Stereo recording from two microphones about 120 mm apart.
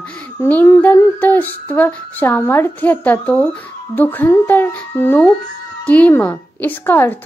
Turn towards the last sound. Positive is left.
turn(degrees=15)  # may be behind; listen again after turning